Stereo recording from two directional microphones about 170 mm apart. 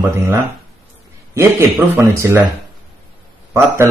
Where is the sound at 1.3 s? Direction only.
15° right (ahead or behind).